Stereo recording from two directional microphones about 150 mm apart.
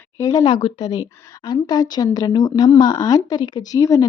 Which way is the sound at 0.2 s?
25° left (ahead or behind).